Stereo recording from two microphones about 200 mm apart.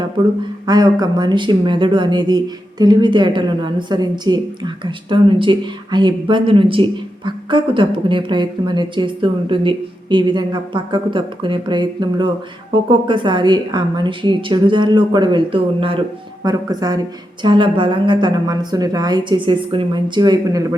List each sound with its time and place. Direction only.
0.2 s a woman's voice: 25° right (ahead or behind)